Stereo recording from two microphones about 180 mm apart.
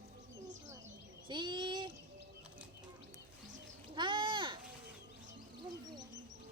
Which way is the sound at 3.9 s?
25° right (ahead or behind).